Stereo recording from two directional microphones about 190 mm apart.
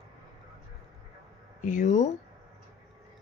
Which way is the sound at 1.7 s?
40° left (ahead or behind).